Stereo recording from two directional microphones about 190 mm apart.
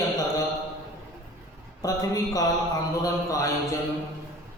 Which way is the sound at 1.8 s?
20° left (ahead or behind).